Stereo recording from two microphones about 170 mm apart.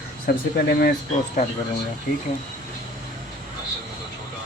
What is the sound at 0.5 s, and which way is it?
Speech, 65° left (ahead or behind).